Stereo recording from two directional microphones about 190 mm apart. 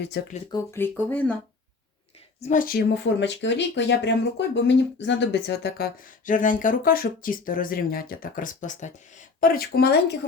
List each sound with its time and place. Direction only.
0.1 s speech: 65° left (ahead or behind)
0.5 s speech: 10° left (ahead or behind)
2.4 s speech: 45° left (ahead or behind)